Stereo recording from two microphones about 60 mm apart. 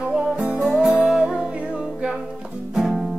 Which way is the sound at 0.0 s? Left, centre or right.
Centre.